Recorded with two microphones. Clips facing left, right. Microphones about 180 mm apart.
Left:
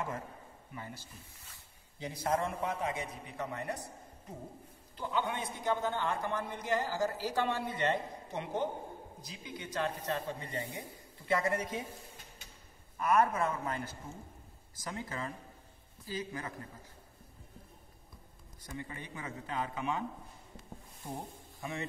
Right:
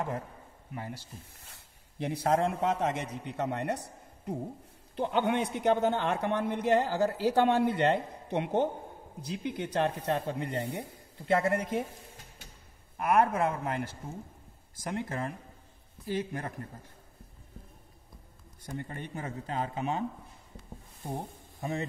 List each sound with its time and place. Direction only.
2.0 s a man's voice: 70° right (ahead or behind)
12.9 s a man's voice: 55° right (ahead or behind)
18.7 s a man's voice: 50° right (ahead or behind)
19.5 s speech: 30° right (ahead or behind)
21.5 s a man's voice: 45° right (ahead or behind)